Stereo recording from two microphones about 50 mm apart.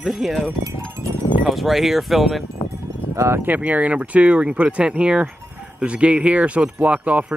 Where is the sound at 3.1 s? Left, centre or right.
Right.